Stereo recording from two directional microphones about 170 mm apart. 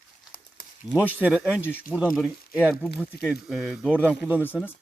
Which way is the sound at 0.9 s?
10° right (ahead or behind).